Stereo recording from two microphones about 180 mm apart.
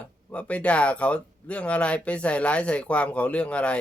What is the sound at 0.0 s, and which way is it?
Speech, 5° left (ahead or behind).